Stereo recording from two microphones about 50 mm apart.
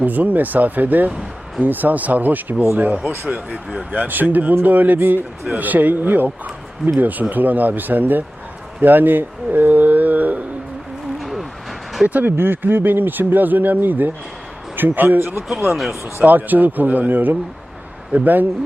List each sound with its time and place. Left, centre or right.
0.0 s speech: right
11.2 s music: centre
12.0 s speech: right
12.4 s speech: right
15.7 s speech: centre
16.2 s speech: right